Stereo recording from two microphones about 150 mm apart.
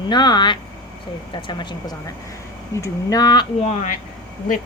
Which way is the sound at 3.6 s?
45° left (ahead or behind).